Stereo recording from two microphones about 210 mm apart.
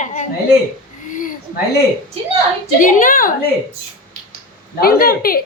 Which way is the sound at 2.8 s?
40° left (ahead or behind).